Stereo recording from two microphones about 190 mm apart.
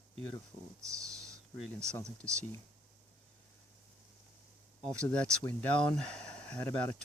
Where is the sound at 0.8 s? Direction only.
15° right (ahead or behind).